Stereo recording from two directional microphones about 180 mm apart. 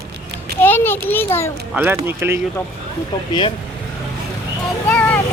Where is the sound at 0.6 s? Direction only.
10° left (ahead or behind).